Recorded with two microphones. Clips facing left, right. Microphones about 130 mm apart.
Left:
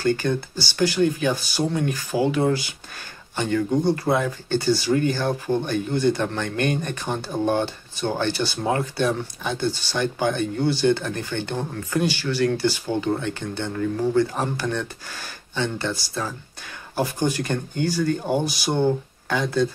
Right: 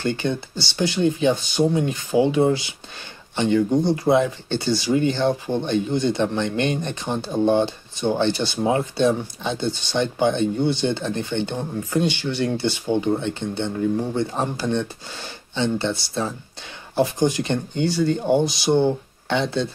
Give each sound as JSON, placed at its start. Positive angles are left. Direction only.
{"t": 0.0, "sound": "speech", "side_deg": -20}